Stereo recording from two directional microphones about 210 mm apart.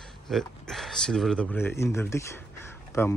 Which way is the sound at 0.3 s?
Centre (ahead or behind).